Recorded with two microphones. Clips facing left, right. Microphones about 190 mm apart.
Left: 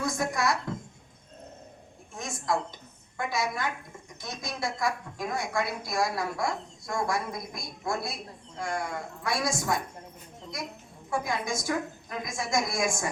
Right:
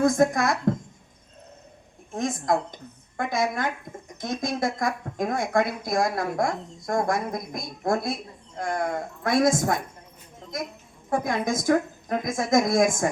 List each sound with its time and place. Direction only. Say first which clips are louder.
0.0 s a woman's voice: right 8 dB; 50° right (ahead or behind)
2.1 s a woman's voice: right 6 dB; 50° right (ahead or behind)
11.1 s a woman's voice: right 5 dB; 50° right (ahead or behind)